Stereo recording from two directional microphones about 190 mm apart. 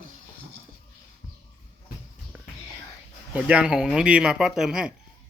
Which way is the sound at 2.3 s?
10° right (ahead or behind).